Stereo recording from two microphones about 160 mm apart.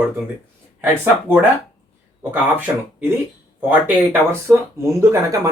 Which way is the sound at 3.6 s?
10° right (ahead or behind).